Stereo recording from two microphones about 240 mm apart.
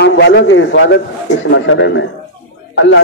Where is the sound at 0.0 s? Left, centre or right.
Left.